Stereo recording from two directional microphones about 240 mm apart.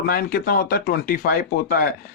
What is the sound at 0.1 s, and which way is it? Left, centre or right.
A man's voice, left.